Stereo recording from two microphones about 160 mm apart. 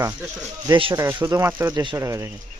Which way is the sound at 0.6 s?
30° right (ahead or behind).